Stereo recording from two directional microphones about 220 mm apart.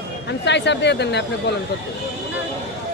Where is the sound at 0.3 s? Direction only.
55° left (ahead or behind).